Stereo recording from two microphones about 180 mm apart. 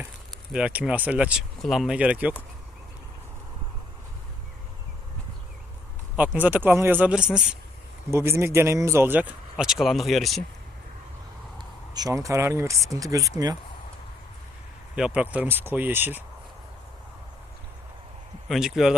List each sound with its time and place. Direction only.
0.5 s speech: 5° right (ahead or behind)
6.1 s speech: 10° right (ahead or behind)
8.1 s speech: 15° right (ahead or behind)
11.5 s speech: 20° right (ahead or behind)
14.9 s speech: 5° right (ahead or behind)
18.4 s speech: centre (ahead or behind)